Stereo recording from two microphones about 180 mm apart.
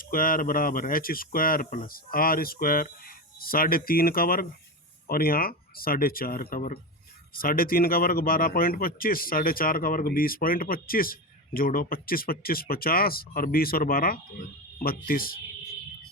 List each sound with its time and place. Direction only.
0.0 s speech: 50° left (ahead or behind)